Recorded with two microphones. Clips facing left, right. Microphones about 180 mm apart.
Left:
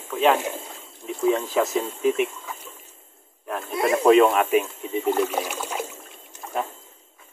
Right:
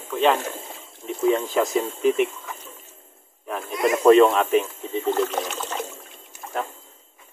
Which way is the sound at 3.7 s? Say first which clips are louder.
Even; 25° left (ahead or behind).